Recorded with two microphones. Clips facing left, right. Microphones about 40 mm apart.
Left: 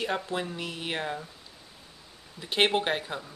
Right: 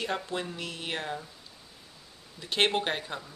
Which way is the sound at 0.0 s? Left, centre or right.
Centre.